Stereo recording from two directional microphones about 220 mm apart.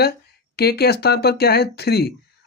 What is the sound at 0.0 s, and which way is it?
Speech, 45° left (ahead or behind).